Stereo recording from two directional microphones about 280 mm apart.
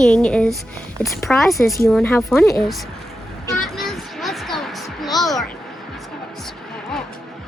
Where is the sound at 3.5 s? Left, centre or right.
Centre.